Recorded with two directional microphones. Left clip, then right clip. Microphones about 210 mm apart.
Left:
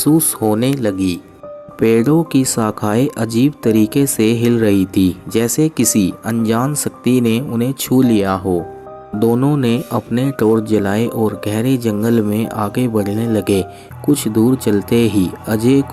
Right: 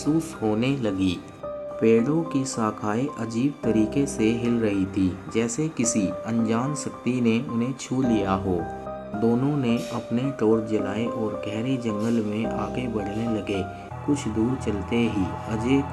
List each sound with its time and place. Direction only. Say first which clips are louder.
0.2 s speech: left 9 dB; 35° left (ahead or behind)
1.8 s speech: left 8 dB; 40° left (ahead or behind)
14.7 s speech: left 11 dB; 40° left (ahead or behind)